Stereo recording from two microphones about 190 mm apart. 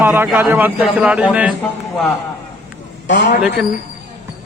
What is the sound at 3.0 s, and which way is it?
Speech, 70° left (ahead or behind).